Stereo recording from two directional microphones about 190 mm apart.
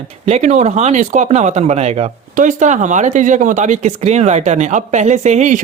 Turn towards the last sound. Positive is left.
turn(degrees=-40)  # may be behind; listen again after turning